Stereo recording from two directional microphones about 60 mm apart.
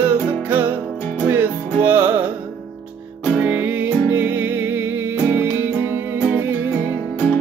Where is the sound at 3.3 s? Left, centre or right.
Right.